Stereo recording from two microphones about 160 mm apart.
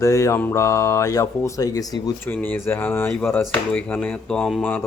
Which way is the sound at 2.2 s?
10° left (ahead or behind).